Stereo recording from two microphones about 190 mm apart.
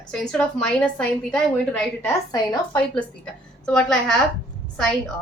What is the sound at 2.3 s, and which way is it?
Speech, 20° left (ahead or behind).